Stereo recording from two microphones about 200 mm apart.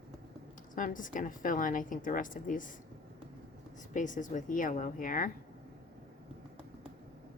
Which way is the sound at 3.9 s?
40° left (ahead or behind).